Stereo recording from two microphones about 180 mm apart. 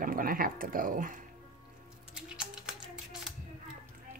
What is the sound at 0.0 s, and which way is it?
Speech, 50° right (ahead or behind).